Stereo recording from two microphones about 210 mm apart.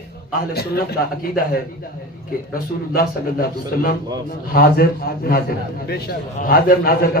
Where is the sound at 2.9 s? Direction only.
45° left (ahead or behind).